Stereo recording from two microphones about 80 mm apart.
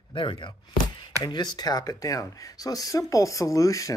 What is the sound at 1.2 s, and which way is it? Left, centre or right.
Speech, left.